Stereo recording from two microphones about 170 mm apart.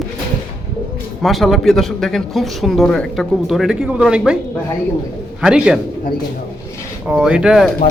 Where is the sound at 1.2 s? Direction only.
Centre (ahead or behind).